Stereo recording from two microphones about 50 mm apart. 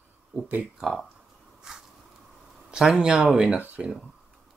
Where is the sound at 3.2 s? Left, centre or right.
Right.